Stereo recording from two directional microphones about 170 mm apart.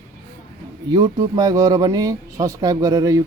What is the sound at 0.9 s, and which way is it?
Speech, 20° right (ahead or behind).